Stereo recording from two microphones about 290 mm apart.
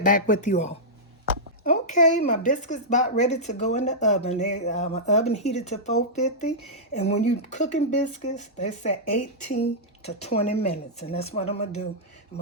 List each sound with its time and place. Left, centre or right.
0.0 s speech: left
7.2 s speech: left